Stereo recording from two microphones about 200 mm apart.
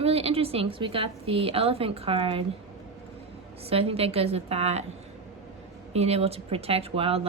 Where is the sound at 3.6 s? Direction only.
30° right (ahead or behind).